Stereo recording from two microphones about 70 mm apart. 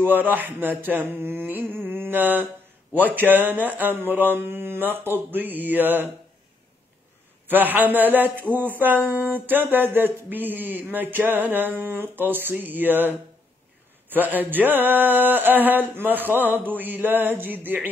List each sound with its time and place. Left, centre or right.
0.0 s speech: right
7.4 s speech: right